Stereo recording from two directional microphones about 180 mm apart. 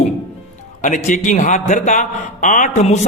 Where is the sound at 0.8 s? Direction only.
40° left (ahead or behind).